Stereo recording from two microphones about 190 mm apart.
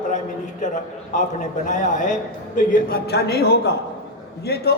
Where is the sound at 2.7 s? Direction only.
50° left (ahead or behind).